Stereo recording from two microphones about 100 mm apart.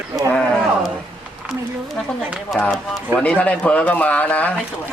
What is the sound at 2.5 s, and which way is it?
A man's voice, 5° left (ahead or behind).